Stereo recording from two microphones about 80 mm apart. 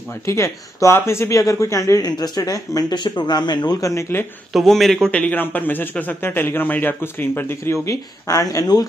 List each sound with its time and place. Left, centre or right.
0.2 s speech: left
3.8 s speech: left
4.5 s a man's voice: centre
5.1 s a man's voice: left